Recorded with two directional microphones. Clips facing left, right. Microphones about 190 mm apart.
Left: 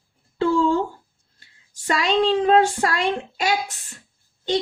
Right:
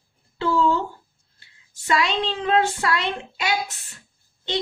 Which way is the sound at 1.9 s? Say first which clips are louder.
Left 4 dB; 40° left (ahead or behind).